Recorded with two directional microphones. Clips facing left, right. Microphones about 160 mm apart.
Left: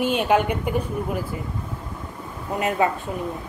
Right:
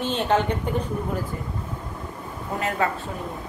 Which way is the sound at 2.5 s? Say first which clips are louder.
Left 3 dB; 20° left (ahead or behind).